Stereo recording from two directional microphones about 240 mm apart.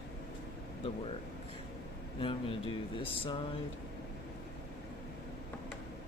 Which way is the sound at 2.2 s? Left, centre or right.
Left.